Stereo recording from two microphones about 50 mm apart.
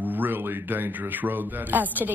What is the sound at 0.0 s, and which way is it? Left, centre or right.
Speech, right.